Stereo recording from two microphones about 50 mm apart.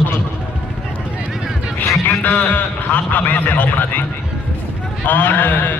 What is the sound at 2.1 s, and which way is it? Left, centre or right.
A man's voice, left.